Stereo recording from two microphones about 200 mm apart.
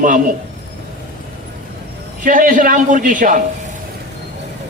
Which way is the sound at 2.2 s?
40° right (ahead or behind).